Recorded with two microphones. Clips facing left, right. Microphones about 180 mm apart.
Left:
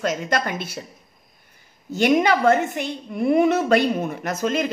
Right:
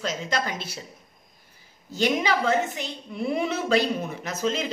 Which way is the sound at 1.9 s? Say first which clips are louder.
Left 6 dB; 55° left (ahead or behind).